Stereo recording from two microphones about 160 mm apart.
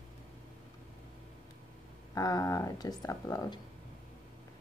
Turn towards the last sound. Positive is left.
turn(degrees=25)  # may be behind; listen again after turning